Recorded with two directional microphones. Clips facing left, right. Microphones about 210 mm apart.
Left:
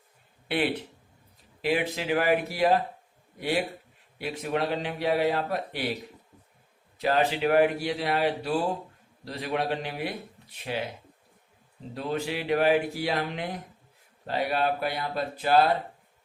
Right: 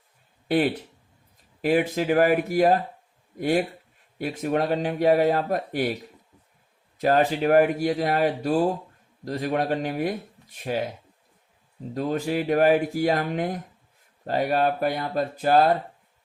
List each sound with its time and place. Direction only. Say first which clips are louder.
0.4 s speech: right 5 dB; 45° right (ahead or behind)
7.0 s speech: right 4 dB; 45° right (ahead or behind)
11.9 s speech: right 5 dB; 45° right (ahead or behind)